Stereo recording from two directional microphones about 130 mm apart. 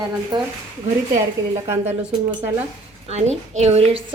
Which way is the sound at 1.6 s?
20° right (ahead or behind).